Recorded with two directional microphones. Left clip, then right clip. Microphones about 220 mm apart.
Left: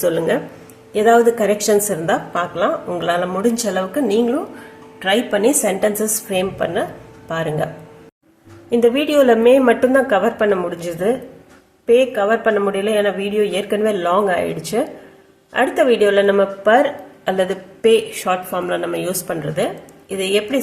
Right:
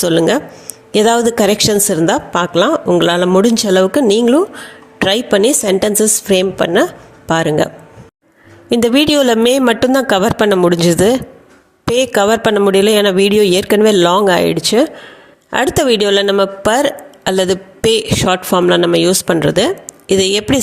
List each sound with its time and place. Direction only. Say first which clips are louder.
0.0 s a woman's voice: right 5 dB; 40° right (ahead or behind)
8.7 s a woman's voice: right 3 dB; 40° right (ahead or behind)